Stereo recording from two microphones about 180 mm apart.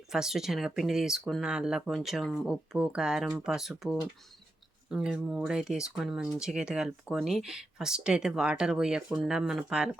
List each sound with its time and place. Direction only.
0.1 s speech: centre (ahead or behind)